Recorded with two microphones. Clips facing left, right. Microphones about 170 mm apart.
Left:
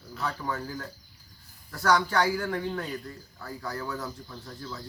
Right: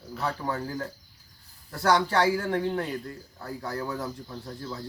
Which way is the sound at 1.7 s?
30° right (ahead or behind).